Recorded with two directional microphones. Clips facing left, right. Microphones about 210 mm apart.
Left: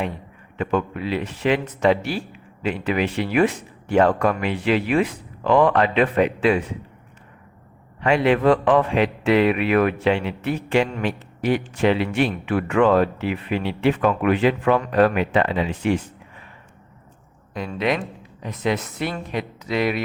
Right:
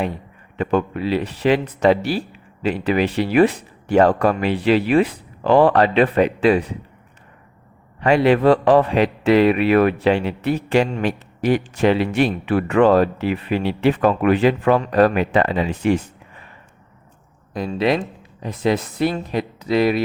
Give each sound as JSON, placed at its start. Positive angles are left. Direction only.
{"t": 0.5, "sound": "a man's voice", "side_deg": -35}
{"t": 8.0, "sound": "a man's voice", "side_deg": -40}
{"t": 17.7, "sound": "a man's voice", "side_deg": -30}